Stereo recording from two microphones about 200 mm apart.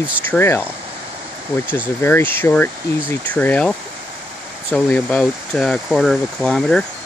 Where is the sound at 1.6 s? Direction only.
5° right (ahead or behind).